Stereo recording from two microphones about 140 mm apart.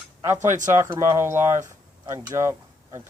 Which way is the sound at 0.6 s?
20° right (ahead or behind).